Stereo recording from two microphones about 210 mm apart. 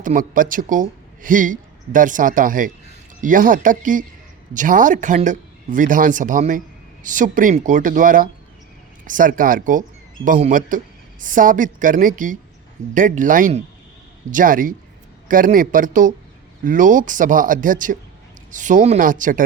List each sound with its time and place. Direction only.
0.0 s speech: 40° right (ahead or behind)